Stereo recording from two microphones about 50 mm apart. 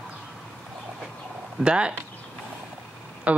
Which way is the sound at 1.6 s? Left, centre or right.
Centre.